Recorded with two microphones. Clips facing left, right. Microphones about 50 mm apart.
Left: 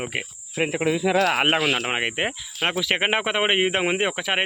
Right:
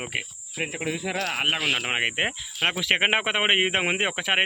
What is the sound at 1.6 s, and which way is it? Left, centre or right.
Speech, centre.